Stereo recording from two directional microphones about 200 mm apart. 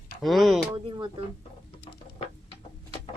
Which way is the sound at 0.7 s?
20° right (ahead or behind).